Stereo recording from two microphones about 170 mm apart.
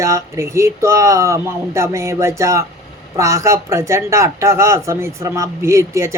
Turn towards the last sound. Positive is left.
turn(degrees=-15)  # may be behind; listen again after turning